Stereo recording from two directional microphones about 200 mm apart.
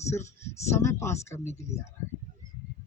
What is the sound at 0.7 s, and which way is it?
Speech, 15° left (ahead or behind).